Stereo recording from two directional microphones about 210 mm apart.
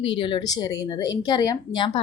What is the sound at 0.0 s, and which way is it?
A woman's voice, 25° left (ahead or behind).